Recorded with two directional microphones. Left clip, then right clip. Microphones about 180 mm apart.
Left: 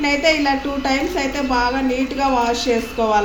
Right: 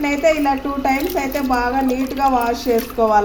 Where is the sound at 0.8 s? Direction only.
40° right (ahead or behind).